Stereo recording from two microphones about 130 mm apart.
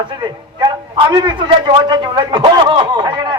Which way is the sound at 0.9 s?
40° right (ahead or behind).